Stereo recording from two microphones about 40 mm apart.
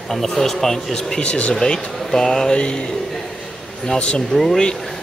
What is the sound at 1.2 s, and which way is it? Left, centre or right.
Speech, left.